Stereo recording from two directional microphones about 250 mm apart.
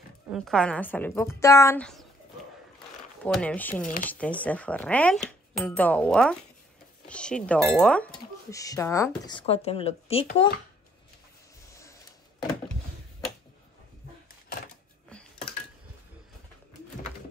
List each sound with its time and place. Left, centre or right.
0.3 s a woman's voice: centre
3.3 s speech: centre
9.3 s speech: left
11.7 s printer: centre